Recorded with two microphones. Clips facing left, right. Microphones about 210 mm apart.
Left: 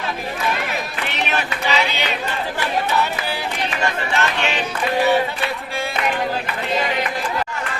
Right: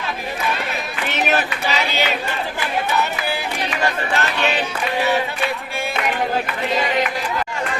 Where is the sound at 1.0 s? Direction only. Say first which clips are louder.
Right 6 dB; 40° right (ahead or behind).